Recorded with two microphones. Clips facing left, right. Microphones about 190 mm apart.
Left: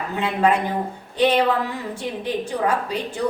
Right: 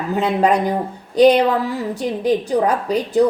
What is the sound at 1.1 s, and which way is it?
A woman's voice, 40° right (ahead or behind).